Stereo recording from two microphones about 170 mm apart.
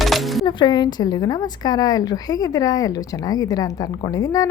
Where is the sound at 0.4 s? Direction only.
25° left (ahead or behind).